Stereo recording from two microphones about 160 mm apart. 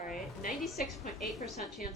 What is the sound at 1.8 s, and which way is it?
Speech, 60° left (ahead or behind).